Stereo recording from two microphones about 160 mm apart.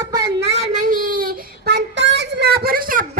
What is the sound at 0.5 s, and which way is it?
Child singing, 45° right (ahead or behind).